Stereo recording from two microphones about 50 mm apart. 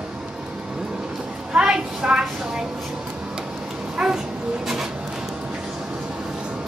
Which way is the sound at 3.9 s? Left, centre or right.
Centre.